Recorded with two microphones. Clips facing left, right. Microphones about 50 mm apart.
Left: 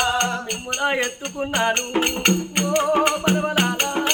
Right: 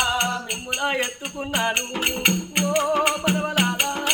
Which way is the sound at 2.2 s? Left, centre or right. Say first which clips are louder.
Left 2 dB; centre.